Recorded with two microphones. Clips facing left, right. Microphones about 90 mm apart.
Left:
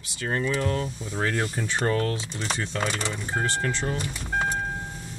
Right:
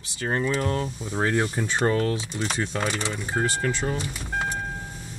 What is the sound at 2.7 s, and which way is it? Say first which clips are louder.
Speech: right 1 dB; 10° right (ahead or behind).